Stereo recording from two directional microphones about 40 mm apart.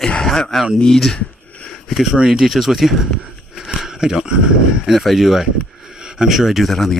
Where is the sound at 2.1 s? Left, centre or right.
Centre.